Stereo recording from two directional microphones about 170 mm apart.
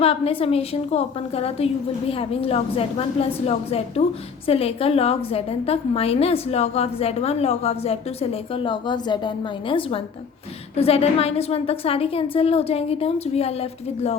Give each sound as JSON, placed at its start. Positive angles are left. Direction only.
{"t": 0.0, "sound": "a woman's voice", "side_deg": 35}